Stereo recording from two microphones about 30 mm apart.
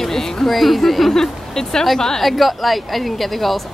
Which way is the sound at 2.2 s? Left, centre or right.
Centre.